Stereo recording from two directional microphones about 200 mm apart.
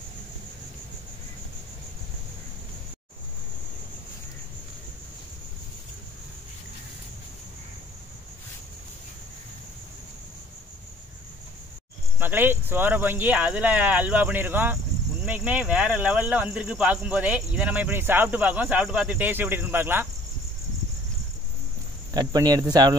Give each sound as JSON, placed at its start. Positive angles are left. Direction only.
{"t": 12.2, "sound": "speech", "side_deg": -10}
{"t": 22.1, "sound": "speech", "side_deg": -20}